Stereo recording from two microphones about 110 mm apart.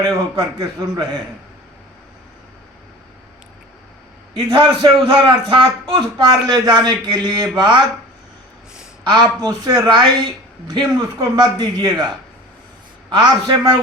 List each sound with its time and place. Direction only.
0.0 s a man's voice: 35° right (ahead or behind)
4.4 s a man's voice: 45° right (ahead or behind)
9.1 s a man's voice: 40° right (ahead or behind)
13.1 s a man's voice: 40° right (ahead or behind)